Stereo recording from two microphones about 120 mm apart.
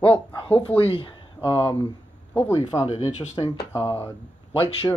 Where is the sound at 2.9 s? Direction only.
65° left (ahead or behind).